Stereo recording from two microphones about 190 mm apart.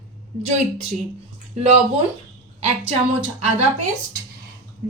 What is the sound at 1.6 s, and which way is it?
Speech, 35° right (ahead or behind).